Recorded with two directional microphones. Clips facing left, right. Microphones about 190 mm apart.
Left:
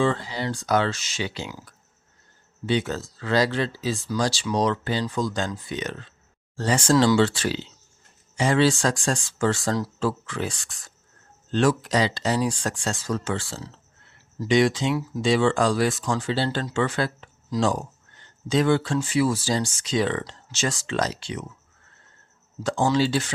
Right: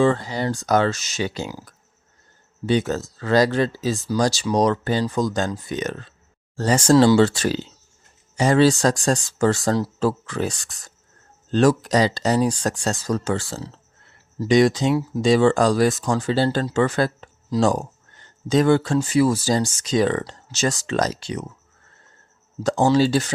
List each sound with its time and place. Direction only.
0.0 s speech: 45° right (ahead or behind)
22.6 s speech: 40° right (ahead or behind)